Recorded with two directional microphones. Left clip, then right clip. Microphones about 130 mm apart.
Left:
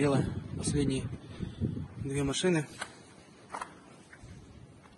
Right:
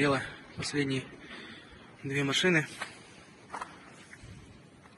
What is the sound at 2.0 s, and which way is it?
Speech, 45° left (ahead or behind).